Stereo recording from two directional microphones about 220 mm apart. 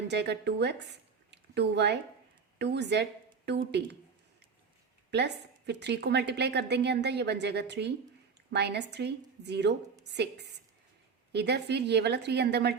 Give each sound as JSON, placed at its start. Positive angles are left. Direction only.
{"t": 0.1, "sound": "a woman's voice", "side_deg": -50}
{"t": 5.1, "sound": "a woman's voice", "side_deg": -50}